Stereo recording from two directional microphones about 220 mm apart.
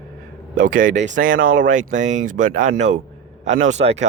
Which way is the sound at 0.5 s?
35° right (ahead or behind).